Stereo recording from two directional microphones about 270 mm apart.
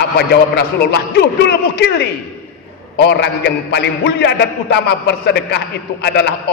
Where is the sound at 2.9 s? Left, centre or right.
Left.